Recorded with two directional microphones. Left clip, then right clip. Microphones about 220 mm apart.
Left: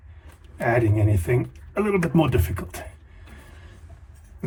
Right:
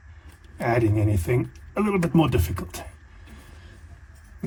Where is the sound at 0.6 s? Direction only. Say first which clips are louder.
Left 1 dB; 45° right (ahead or behind).